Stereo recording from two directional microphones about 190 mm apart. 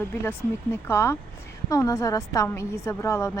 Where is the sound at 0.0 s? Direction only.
10° left (ahead or behind).